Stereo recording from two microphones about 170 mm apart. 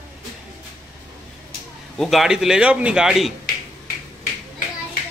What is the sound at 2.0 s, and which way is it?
A man's voice, centre (ahead or behind).